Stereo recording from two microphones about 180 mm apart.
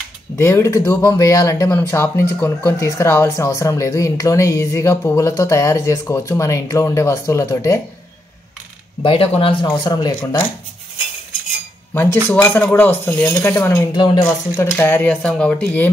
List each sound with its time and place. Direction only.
0.4 s speech: 15° left (ahead or behind)
9.0 s speech: 30° left (ahead or behind)
12.3 s speech: 10° left (ahead or behind)
13.9 s speech: 25° left (ahead or behind)
14.2 s speech: 15° left (ahead or behind)